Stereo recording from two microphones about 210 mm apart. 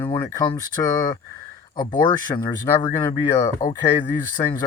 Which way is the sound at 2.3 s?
20° left (ahead or behind).